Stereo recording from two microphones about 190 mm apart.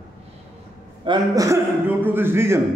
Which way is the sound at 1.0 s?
20° right (ahead or behind).